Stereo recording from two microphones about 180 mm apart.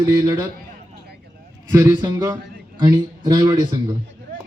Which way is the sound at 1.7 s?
15° right (ahead or behind).